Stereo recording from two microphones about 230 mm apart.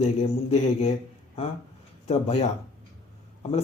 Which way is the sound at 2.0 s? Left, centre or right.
Left.